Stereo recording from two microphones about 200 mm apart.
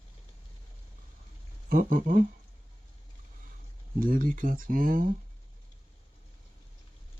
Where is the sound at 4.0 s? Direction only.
45° right (ahead or behind).